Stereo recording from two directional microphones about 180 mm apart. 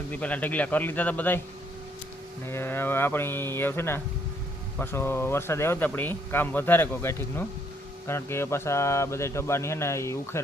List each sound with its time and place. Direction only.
0.1 s speech: 10° left (ahead or behind)
2.5 s speech: 15° left (ahead or behind)